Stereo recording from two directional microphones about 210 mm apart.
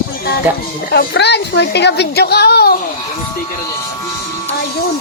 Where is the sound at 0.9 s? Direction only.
50° left (ahead or behind).